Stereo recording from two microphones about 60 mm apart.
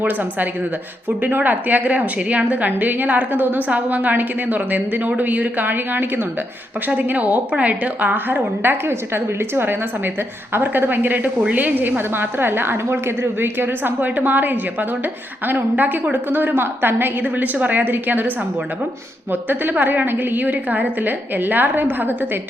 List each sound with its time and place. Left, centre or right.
0.0 s a woman's voice: right
1.5 s a woman's voice: right
19.3 s a woman's voice: right